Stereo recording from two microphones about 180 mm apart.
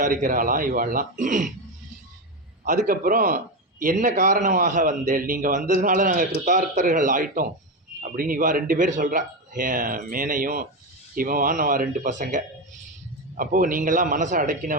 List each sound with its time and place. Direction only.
0.0 s a man's voice: 50° right (ahead or behind)
2.6 s a man's voice: 50° right (ahead or behind)